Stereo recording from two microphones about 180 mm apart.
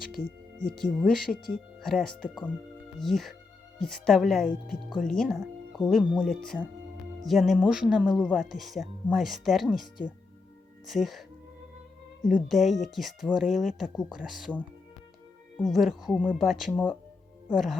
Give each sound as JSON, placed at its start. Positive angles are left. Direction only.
{"t": 0.2, "sound": "speech", "side_deg": 50}
{"t": 0.7, "sound": "speech", "side_deg": 0}
{"t": 1.3, "sound": "speech", "side_deg": 50}
{"t": 1.8, "sound": "speech", "side_deg": 0}